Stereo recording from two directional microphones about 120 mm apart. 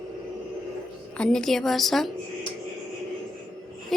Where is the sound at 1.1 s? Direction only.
5° left (ahead or behind).